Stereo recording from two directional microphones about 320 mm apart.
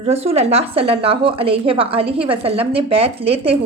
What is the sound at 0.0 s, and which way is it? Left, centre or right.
A woman's voice, centre.